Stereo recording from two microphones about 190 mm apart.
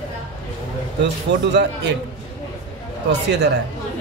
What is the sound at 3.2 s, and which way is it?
Speech, 60° right (ahead or behind).